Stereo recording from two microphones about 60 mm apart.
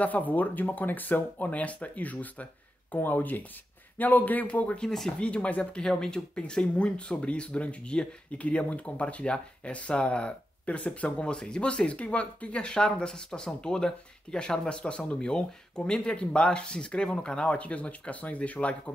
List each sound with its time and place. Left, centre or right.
0.0 s speech: left
4.8 s speech: centre
5.2 s speech: left